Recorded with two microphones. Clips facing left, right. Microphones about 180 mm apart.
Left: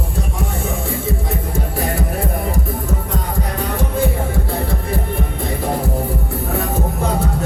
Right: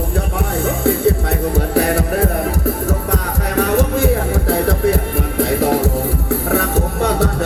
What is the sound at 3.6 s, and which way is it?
Music, 85° right.